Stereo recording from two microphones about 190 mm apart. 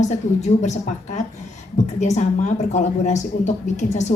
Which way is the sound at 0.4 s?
35° left (ahead or behind).